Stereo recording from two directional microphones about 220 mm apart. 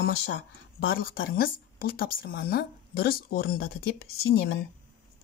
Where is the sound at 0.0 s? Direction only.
55° left (ahead or behind).